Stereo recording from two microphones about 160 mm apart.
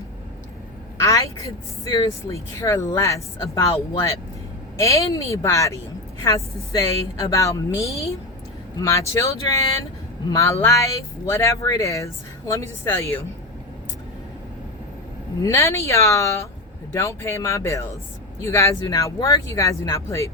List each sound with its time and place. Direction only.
0.9 s a woman's voice: 20° left (ahead or behind)
7.3 s a woman's voice: 20° left (ahead or behind)
15.4 s a woman's voice: 20° left (ahead or behind)